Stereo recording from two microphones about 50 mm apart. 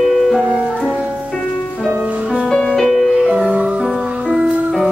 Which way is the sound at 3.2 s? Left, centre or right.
Centre.